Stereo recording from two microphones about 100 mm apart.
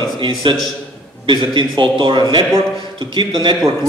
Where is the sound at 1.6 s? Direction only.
55° right (ahead or behind).